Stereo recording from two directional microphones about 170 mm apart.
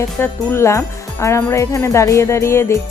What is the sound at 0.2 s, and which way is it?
Speech, 15° left (ahead or behind).